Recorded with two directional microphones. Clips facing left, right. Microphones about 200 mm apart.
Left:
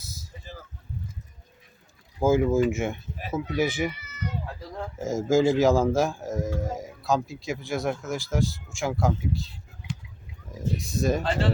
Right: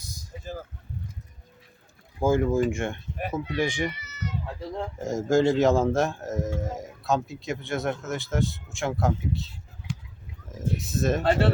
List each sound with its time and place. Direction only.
2.2 s speech: 5° left (ahead or behind)
4.0 s cat: 55° left (ahead or behind)
4.4 s a sound: 25° right (ahead or behind)
4.9 s speech: centre (ahead or behind)
11.2 s speech: 65° right (ahead or behind)